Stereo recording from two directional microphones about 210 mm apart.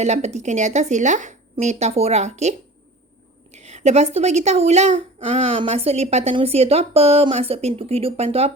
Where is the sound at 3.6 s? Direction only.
30° right (ahead or behind).